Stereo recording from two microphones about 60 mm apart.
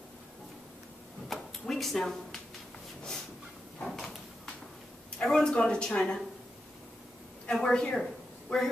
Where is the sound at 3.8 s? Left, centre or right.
Centre.